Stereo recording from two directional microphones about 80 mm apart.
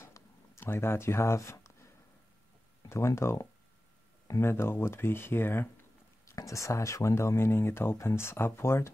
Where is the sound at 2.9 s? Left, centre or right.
Left.